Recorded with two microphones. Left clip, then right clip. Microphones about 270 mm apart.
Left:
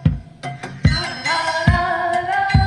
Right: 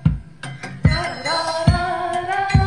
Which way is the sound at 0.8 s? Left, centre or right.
Left.